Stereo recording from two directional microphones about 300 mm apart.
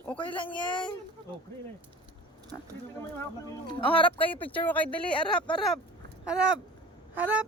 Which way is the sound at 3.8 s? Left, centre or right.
Centre.